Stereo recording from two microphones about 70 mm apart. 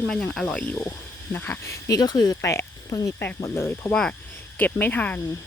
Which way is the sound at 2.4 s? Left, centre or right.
Left.